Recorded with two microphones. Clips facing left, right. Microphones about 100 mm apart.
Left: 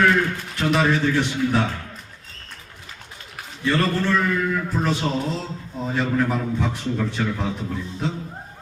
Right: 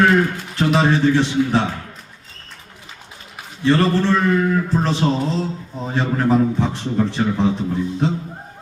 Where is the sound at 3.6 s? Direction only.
25° right (ahead or behind).